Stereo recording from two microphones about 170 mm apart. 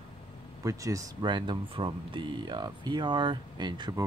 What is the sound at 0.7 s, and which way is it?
Speech, 20° right (ahead or behind).